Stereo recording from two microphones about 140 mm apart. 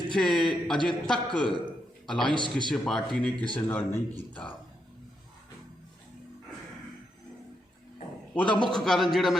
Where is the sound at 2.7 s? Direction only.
5° left (ahead or behind).